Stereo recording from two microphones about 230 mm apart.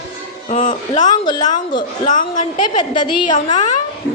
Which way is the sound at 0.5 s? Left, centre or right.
Left.